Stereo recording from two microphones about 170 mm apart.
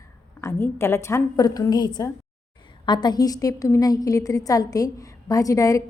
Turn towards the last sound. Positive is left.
turn(degrees=20)  # may be behind; listen again after turning